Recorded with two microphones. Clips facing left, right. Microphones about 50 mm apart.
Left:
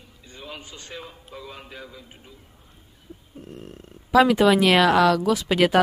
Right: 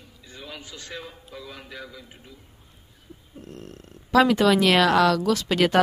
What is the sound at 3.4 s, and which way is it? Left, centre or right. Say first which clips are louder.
Speech: left 1 dB; centre.